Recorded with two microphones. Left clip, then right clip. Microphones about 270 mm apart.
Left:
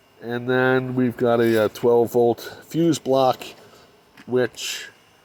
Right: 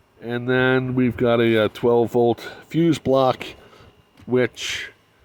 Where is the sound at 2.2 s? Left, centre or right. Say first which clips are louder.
Even; right.